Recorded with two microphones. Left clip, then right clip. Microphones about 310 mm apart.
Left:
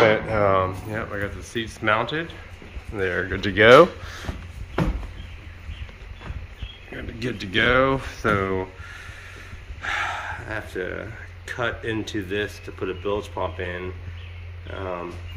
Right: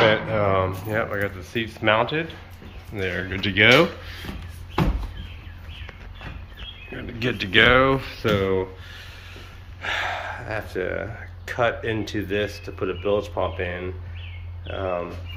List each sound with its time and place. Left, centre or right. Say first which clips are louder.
0.0 s speech: left 1 dB; centre
0.8 s speech: right 4 dB; centre; by 4.3 s left
6.9 s speech: right 3 dB; centre
9.8 s speech: even; centre